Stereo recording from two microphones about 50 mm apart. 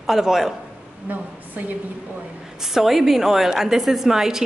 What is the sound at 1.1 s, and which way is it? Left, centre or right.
Speech, right.